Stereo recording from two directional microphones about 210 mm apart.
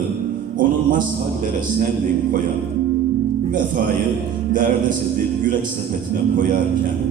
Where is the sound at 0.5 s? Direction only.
40° right (ahead or behind).